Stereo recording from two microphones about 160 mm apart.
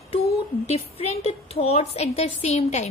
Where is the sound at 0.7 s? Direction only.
40° left (ahead or behind).